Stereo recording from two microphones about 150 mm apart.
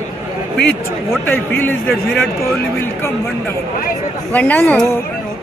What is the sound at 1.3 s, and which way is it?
Speech, 15° left (ahead or behind).